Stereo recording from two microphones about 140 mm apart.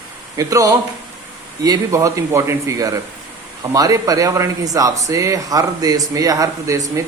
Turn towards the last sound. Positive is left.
turn(degrees=-25)  # may be behind; listen again after turning